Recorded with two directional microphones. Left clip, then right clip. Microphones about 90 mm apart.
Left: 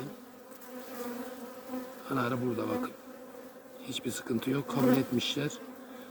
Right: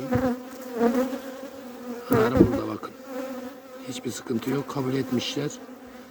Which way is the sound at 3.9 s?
40° right (ahead or behind).